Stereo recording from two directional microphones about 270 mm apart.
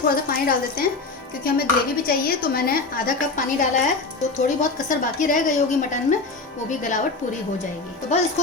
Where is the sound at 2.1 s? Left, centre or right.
Left.